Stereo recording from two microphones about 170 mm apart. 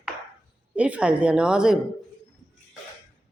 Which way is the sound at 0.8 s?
5° right (ahead or behind).